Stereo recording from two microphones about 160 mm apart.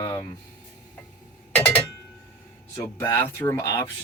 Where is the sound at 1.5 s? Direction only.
10° left (ahead or behind).